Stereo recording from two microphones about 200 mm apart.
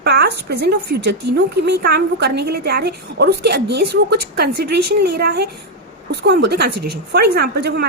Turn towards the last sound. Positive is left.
turn(degrees=-55)  # may be behind; listen again after turning